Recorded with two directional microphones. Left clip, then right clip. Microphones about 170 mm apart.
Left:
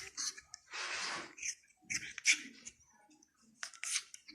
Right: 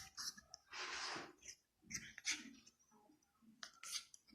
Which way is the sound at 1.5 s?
25° right (ahead or behind).